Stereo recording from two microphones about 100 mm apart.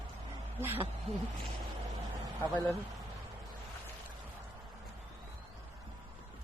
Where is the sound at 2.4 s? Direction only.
20° left (ahead or behind).